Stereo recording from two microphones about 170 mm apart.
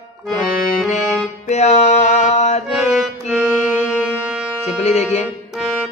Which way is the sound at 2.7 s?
5° right (ahead or behind).